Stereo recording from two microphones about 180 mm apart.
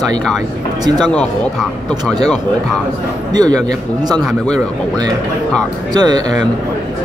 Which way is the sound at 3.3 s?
20° right (ahead or behind).